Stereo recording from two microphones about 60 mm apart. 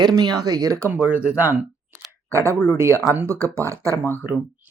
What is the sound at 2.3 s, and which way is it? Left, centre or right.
Speech, right.